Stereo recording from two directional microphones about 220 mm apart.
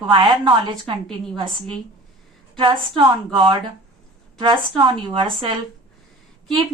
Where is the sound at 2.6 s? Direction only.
25° right (ahead or behind).